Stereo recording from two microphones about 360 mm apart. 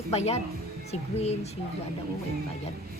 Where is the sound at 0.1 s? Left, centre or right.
Centre.